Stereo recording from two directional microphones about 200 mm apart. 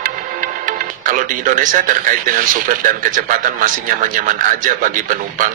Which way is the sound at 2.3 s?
40° right (ahead or behind).